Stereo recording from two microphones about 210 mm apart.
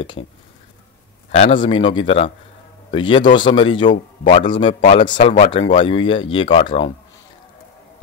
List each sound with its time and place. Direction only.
1.3 s speech: 30° left (ahead or behind)